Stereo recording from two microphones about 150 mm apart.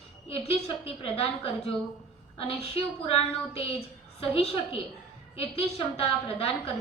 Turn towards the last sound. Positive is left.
turn(degrees=40)  # may be behind; listen again after turning